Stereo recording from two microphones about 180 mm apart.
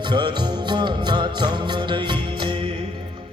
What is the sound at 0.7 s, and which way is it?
Music, 25° right (ahead or behind).